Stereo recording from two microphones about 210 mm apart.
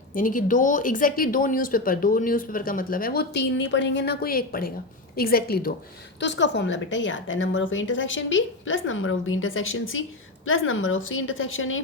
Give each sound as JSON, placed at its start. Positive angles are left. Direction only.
{"t": 0.1, "sound": "a woman's voice", "side_deg": 40}
{"t": 6.1, "sound": "a woman's voice", "side_deg": 55}